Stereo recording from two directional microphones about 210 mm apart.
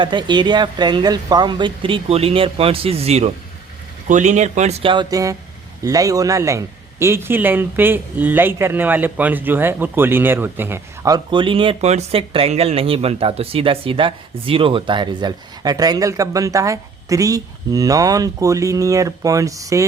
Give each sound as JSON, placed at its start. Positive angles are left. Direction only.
{"t": 0.0, "sound": "speech", "side_deg": -20}